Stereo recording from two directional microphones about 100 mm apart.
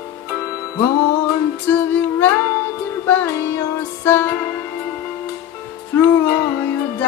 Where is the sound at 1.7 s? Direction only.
20° left (ahead or behind).